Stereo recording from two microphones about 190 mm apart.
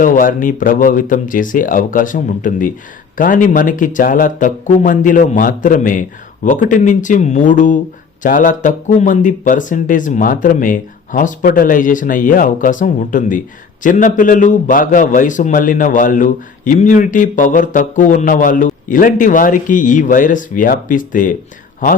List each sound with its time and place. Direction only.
0.0 s a man's voice: 45° left (ahead or behind)